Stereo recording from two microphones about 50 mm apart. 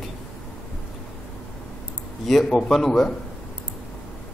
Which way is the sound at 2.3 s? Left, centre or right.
Centre.